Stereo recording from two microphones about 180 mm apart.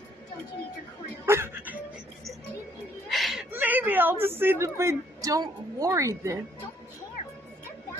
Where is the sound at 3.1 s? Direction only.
Centre (ahead or behind).